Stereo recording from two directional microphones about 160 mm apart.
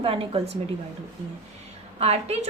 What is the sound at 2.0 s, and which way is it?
Speech, 40° right (ahead or behind).